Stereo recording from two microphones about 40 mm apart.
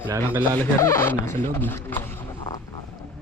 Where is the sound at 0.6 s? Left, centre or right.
Left.